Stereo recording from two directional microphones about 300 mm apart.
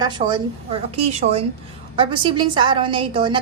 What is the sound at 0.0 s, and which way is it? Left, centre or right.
A woman's voice, centre.